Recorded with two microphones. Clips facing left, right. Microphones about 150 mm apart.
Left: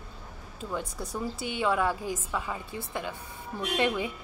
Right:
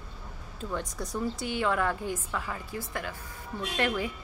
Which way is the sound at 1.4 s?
20° left (ahead or behind).